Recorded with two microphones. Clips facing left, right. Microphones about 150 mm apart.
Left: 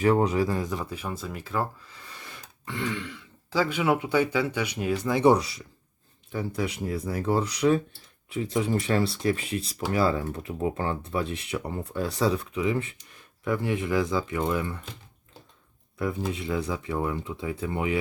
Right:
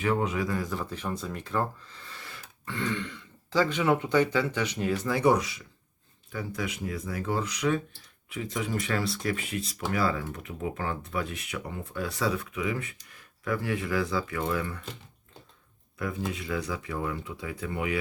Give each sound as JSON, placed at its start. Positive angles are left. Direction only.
{"t": 0.0, "sound": "speech", "side_deg": 35}
{"t": 16.0, "sound": "speech", "side_deg": 25}